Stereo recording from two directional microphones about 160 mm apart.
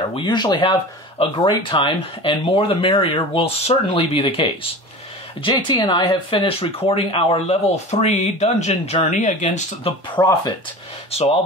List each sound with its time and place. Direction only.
0.1 s speech: 30° left (ahead or behind); by 9.9 s 45° left (ahead or behind)
10.2 s speech: 15° left (ahead or behind)
11.1 s speech: 40° left (ahead or behind)